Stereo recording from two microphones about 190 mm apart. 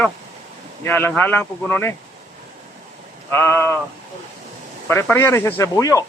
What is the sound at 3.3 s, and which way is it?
Speech, 10° left (ahead or behind).